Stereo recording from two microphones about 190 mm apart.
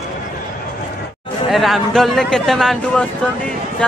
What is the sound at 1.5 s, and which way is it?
Speech, centre (ahead or behind).